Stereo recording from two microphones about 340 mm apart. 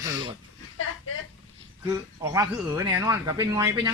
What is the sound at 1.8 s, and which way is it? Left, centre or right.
Speech, centre.